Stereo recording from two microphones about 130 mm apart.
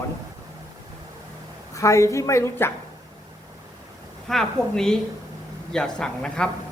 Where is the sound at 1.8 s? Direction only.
25° left (ahead or behind).